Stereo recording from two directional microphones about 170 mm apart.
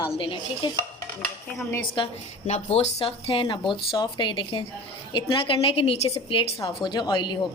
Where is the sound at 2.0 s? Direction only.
25° left (ahead or behind).